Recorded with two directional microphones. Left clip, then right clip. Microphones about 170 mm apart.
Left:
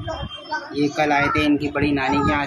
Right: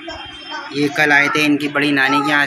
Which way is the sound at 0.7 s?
5° right (ahead or behind).